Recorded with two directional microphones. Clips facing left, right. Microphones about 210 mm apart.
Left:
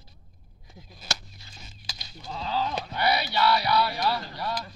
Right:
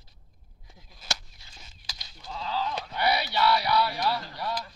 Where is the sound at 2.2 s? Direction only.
20° left (ahead or behind).